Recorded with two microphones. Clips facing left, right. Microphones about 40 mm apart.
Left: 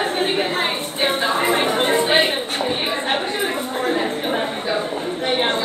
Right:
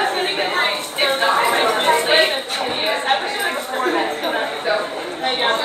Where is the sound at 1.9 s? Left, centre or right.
Right.